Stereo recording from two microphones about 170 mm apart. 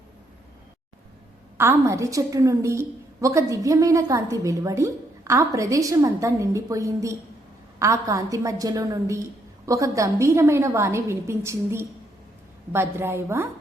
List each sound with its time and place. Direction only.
1.5 s a woman's voice: 15° right (ahead or behind)